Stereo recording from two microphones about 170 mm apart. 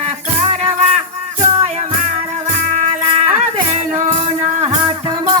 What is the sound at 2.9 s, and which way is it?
Music, 40° right (ahead or behind).